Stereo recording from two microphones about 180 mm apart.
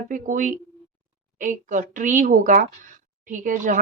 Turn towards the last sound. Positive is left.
turn(degrees=-45)  # may be behind; listen again after turning